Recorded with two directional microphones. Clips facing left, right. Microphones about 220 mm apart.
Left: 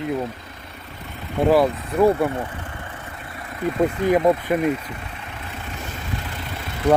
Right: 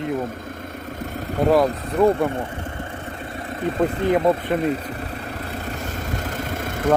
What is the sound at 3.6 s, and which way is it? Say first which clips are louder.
Speech: left 1 dB; 30° right (ahead or behind).